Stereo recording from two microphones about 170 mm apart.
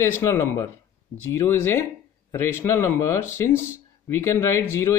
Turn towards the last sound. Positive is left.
turn(degrees=15)  # may be behind; listen again after turning